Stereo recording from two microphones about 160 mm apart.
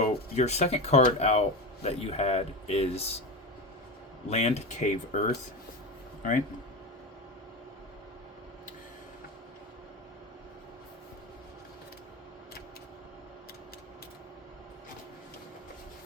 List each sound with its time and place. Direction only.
0.0 s speech: 45° left (ahead or behind)
4.3 s speech: 45° left (ahead or behind)